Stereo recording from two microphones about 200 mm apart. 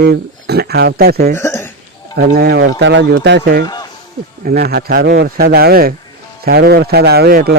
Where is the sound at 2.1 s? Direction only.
50° right (ahead or behind).